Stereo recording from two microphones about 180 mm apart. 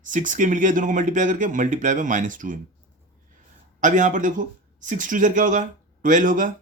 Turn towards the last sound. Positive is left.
turn(degrees=-45)  # may be behind; listen again after turning